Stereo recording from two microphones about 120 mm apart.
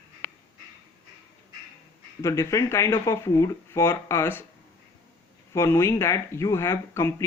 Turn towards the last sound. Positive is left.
turn(degrees=25)  # may be behind; listen again after turning